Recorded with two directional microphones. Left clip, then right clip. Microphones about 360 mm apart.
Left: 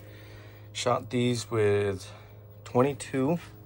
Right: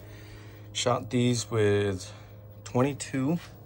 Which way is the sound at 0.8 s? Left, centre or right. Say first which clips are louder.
Even; centre.